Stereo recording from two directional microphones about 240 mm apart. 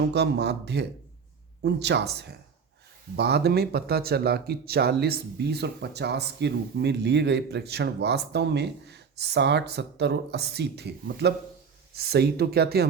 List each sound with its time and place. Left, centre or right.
0.1 s speech: right